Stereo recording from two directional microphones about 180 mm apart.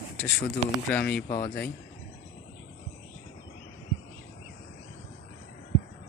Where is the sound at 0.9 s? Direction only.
10° left (ahead or behind).